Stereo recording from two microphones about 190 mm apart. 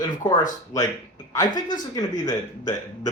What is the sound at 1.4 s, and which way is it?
Speech, 45° left (ahead or behind).